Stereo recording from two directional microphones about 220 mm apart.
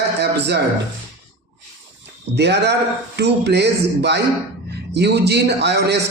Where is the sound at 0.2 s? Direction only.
50° right (ahead or behind).